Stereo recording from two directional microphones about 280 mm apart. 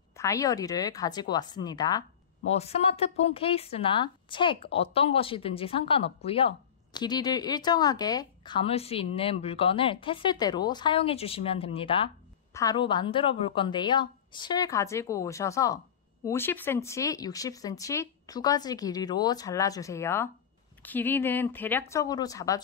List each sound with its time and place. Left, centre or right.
0.1 s speech: centre